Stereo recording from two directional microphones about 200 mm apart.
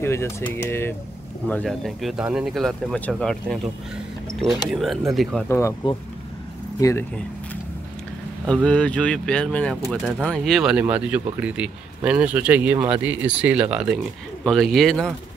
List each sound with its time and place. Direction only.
0.0 s speech: 10° left (ahead or behind)
5.6 s speech: 15° left (ahead or behind)
8.6 s speech: 5° left (ahead or behind)